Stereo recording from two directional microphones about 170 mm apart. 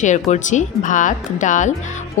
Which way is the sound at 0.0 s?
45° left (ahead or behind).